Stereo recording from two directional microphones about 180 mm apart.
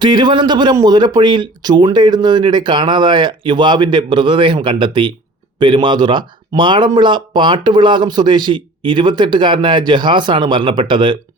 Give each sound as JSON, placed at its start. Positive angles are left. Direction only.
{"t": 0.0, "sound": "speech", "side_deg": -25}